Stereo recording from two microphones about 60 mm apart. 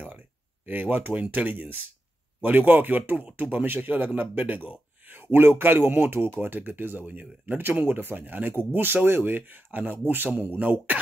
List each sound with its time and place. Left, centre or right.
0.7 s speech: right